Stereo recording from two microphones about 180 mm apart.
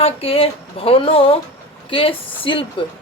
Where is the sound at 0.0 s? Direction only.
30° left (ahead or behind).